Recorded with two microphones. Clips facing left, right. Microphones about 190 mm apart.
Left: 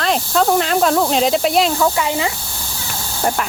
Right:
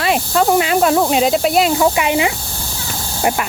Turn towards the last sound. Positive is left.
turn(degrees=-10)  # may be behind; listen again after turning